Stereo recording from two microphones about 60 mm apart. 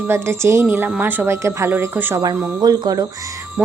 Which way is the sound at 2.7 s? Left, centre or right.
Right.